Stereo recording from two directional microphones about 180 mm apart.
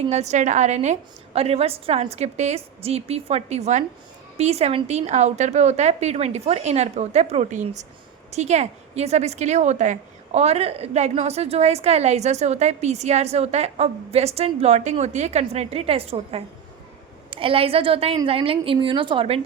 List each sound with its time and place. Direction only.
0.1 s a woman's voice: 40° right (ahead or behind)